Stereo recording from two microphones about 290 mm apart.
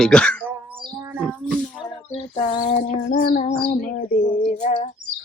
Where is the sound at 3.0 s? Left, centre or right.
Left.